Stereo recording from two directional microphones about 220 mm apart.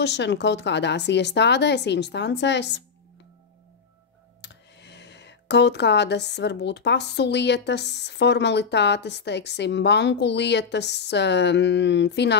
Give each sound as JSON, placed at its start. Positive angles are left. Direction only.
{"t": 0.0, "sound": "speech", "side_deg": 50}
{"t": 4.4, "sound": "speech", "side_deg": 50}